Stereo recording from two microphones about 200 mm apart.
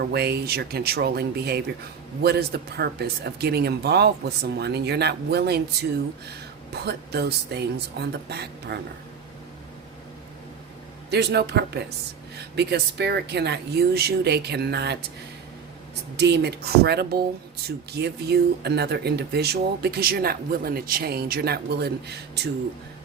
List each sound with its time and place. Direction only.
0.0 s speech: 55° right (ahead or behind)
6.7 s speech: 55° right (ahead or behind)
11.1 s speech: 55° right (ahead or behind)
16.1 s speech: 55° right (ahead or behind)